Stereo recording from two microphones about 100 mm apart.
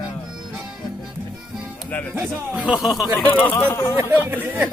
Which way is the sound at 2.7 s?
5° right (ahead or behind).